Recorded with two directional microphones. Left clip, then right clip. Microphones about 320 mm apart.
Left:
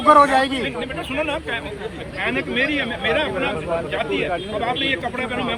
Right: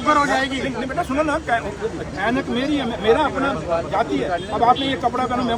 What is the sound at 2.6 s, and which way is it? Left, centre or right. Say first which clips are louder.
Speech: left 2 dB; right.